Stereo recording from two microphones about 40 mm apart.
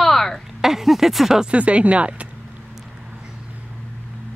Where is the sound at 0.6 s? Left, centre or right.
Centre.